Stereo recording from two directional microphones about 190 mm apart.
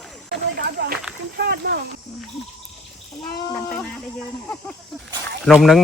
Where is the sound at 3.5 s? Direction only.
15° left (ahead or behind).